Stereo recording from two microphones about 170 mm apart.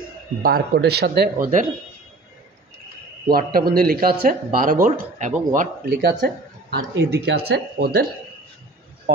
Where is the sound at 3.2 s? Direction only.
65° right (ahead or behind); by 5.4 s 45° right (ahead or behind).